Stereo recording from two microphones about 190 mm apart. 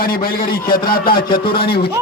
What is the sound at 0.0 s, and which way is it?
A man's voice, 50° left (ahead or behind).